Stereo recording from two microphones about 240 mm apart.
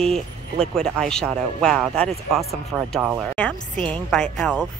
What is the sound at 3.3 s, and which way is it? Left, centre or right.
Speech, centre.